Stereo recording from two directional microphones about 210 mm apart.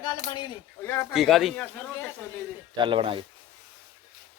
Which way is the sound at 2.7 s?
25° right (ahead or behind).